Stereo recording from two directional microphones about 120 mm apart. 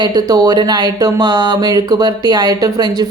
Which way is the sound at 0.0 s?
30° right (ahead or behind).